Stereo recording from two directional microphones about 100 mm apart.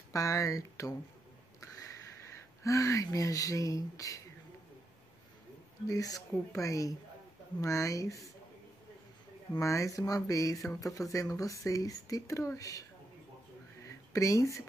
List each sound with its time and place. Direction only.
0.1 s speech: 35° left (ahead or behind)
2.6 s speech: 35° left (ahead or behind)
5.9 s speech: 35° left (ahead or behind)
9.6 s speech: 30° left (ahead or behind)
13.8 s a sound: 30° left (ahead or behind)